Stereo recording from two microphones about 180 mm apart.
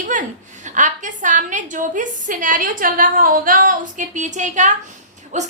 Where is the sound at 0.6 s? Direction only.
45° right (ahead or behind).